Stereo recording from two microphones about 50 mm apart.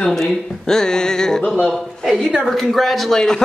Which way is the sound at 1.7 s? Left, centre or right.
Centre.